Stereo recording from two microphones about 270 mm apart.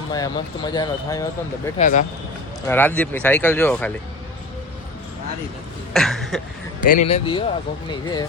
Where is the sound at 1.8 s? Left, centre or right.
Left.